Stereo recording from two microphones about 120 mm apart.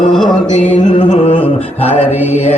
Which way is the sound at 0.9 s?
50° left (ahead or behind).